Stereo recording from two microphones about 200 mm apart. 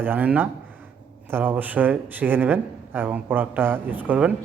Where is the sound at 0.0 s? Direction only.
10° right (ahead or behind).